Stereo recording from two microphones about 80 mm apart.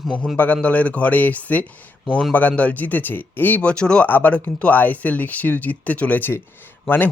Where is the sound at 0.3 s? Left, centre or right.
Centre.